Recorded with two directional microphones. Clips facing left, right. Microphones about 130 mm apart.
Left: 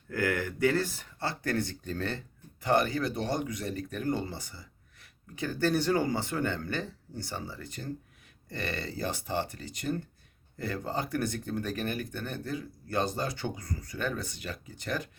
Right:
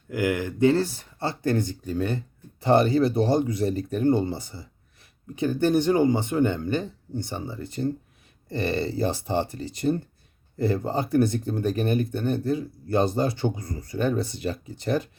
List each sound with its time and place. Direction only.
0.1 s speech: 15° right (ahead or behind)
1.8 s speech: 10° right (ahead or behind)
2.6 s speech: 25° right (ahead or behind)